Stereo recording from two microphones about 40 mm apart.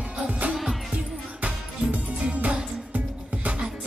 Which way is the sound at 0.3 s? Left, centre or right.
Right.